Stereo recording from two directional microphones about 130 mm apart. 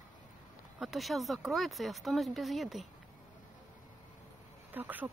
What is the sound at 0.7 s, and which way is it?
Speech, centre (ahead or behind).